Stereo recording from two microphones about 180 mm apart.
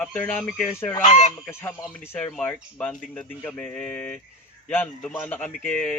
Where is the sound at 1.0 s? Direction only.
40° left (ahead or behind).